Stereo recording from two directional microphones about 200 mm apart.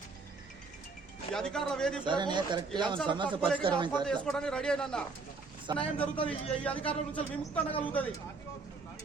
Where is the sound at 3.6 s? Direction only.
25° right (ahead or behind).